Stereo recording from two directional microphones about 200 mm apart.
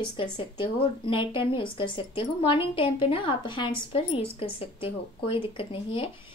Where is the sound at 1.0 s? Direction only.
25° left (ahead or behind).